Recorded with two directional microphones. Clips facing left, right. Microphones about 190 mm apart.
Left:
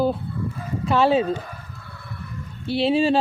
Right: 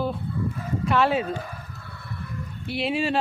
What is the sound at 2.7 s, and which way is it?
Speech, 30° left (ahead or behind).